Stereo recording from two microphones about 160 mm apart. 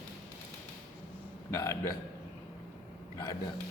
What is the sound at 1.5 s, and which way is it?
Speech, 20° left (ahead or behind).